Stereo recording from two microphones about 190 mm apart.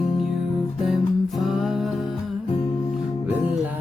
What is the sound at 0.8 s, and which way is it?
Music, centre (ahead or behind).